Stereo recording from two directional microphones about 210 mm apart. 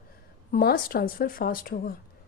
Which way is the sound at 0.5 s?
45° left (ahead or behind).